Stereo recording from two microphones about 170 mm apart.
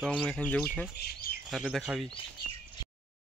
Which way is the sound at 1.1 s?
55° left (ahead or behind).